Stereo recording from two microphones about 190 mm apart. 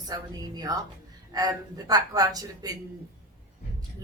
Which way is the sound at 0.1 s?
20° right (ahead or behind).